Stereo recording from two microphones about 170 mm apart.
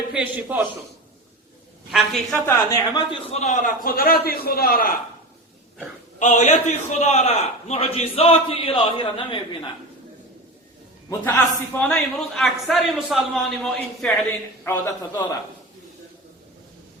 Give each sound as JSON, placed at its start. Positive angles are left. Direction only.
{"t": 0.1, "sound": "a man's voice", "side_deg": -10}
{"t": 1.9, "sound": "a man's voice", "side_deg": 0}
{"t": 2.5, "sound": "a man's voice", "side_deg": 15}
{"t": 3.1, "sound": "a man's voice", "side_deg": 40}
{"t": 6.1, "sound": "a man's voice", "side_deg": 45}
{"t": 11.2, "sound": "a man's voice", "side_deg": 10}
{"t": 14.6, "sound": "a man's voice", "side_deg": 15}